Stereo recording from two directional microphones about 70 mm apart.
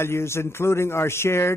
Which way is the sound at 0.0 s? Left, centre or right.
Left.